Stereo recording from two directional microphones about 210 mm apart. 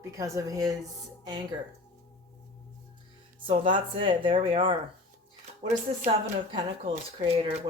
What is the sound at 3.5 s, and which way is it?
A woman's voice, 25° right (ahead or behind).